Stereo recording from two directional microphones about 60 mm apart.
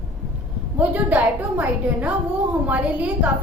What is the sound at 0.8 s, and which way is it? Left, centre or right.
A woman's voice, right.